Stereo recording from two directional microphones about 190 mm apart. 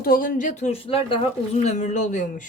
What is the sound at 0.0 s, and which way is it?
Speech, 50° left (ahead or behind).